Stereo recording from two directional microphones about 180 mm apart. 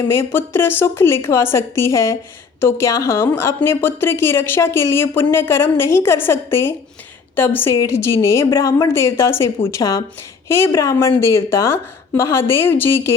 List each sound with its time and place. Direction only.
0.1 s a woman's voice: 15° left (ahead or behind)